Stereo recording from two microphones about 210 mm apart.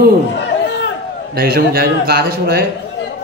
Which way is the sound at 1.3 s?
45° right (ahead or behind).